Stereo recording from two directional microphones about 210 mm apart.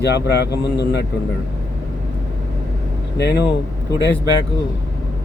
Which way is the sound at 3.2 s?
55° left (ahead or behind).